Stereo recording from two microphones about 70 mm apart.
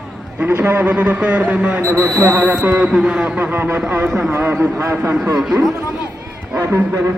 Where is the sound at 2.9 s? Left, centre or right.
Centre.